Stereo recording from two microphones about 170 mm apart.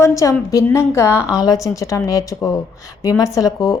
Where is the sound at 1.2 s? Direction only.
5° right (ahead or behind).